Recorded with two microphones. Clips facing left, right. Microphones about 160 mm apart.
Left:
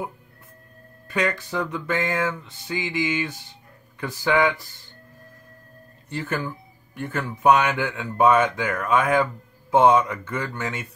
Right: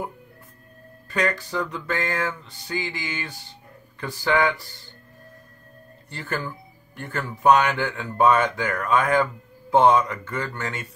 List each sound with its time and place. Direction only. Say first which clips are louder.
1.1 s a sound: even; 15° left (ahead or behind)
4.0 s speech: left 1 dB; 20° left (ahead or behind)
6.0 s speech: left 2 dB; 20° left (ahead or behind)